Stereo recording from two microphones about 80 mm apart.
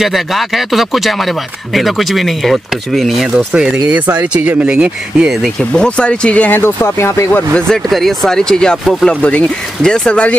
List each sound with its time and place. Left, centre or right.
0.0 s speech: centre
5.6 s speech: centre; by 7.4 s left
7.5 s speech: centre